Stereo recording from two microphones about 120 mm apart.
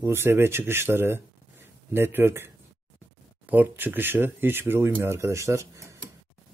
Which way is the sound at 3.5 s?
15° right (ahead or behind).